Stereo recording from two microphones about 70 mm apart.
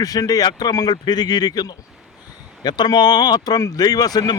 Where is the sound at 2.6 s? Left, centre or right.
Left.